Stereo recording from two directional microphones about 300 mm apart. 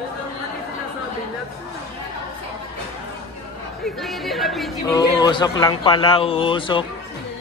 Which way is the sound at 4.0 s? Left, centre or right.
Centre.